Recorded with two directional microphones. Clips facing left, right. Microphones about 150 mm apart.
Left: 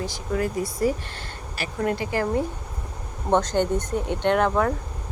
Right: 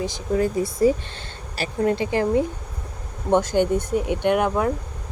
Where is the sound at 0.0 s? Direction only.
25° right (ahead or behind).